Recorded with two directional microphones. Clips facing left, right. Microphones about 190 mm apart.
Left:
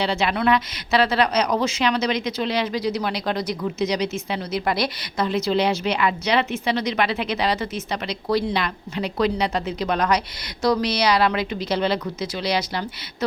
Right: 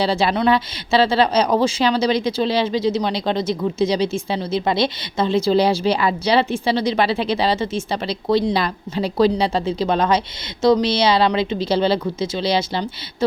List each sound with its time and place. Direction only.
0.0 s a woman's voice: 35° right (ahead or behind)